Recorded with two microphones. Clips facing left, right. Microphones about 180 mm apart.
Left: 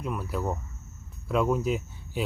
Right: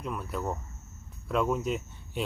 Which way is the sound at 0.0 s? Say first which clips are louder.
Left 3 dB; centre (ahead or behind).